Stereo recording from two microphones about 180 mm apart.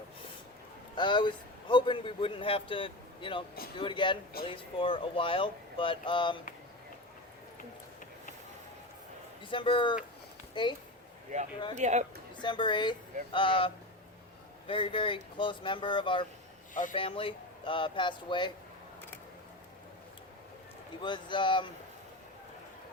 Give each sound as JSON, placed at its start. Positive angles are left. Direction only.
{"t": 0.9, "sound": "speech", "side_deg": 25}
{"t": 9.5, "sound": "speech", "side_deg": 30}
{"t": 11.3, "sound": "speech", "side_deg": -45}
{"t": 12.4, "sound": "speech", "side_deg": 25}
{"t": 21.0, "sound": "speech", "side_deg": 25}